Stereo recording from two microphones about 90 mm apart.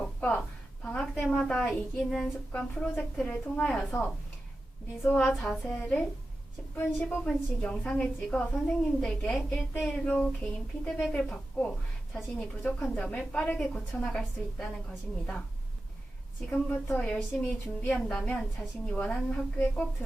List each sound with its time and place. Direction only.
0.0 s a sound: 15° left (ahead or behind)
1.3 s a woman's voice: 10° left (ahead or behind)
5.1 s a woman's voice: 5° left (ahead or behind)
16.5 s a woman's voice: 15° left (ahead or behind)